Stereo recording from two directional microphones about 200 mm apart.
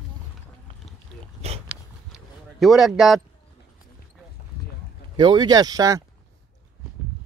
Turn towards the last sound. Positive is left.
turn(degrees=-20)  # may be behind; listen again after turning